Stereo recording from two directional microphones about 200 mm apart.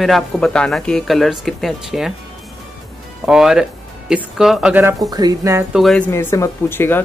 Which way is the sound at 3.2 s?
5° right (ahead or behind).